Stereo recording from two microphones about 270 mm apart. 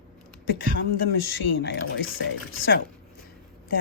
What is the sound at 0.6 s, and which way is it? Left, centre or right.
Speech, left.